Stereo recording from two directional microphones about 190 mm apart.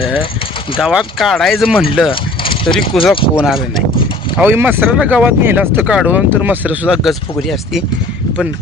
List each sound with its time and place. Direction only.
0.0 s speech: 30° left (ahead or behind)
0.8 s speech: 5° right (ahead or behind)
2.0 s a sound: 25° left (ahead or behind)
2.9 s speech: centre (ahead or behind)